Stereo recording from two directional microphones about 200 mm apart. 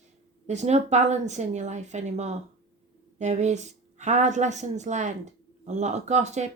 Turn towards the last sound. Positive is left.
turn(degrees=-35)  # may be behind; listen again after turning